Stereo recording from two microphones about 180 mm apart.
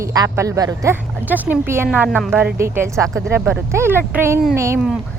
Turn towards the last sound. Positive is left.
turn(degrees=-15)  # may be behind; listen again after turning